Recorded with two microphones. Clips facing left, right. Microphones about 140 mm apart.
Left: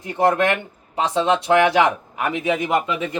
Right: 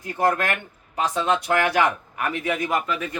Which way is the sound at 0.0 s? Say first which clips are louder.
Left 4 dB; 25° left (ahead or behind).